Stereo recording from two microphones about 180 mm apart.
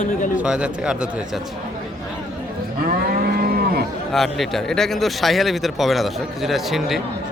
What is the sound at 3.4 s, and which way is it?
Cattle, 55° right (ahead or behind).